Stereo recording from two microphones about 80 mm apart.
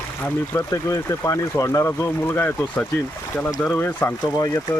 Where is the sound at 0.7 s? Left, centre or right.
Left.